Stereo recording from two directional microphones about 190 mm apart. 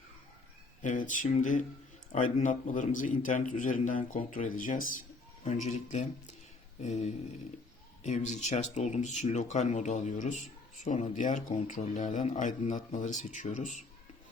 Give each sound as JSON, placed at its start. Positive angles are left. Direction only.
{"t": 0.8, "sound": "a man's voice", "side_deg": 45}
{"t": 8.4, "sound": "speech", "side_deg": 40}